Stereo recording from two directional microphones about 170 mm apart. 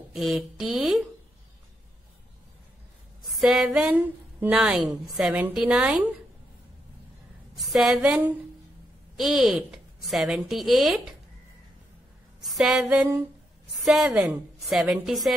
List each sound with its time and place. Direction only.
0.1 s a woman's voice: centre (ahead or behind)
3.3 s a woman's voice: centre (ahead or behind)
7.5 s a woman's voice: centre (ahead or behind)
12.4 s a woman's voice: centre (ahead or behind)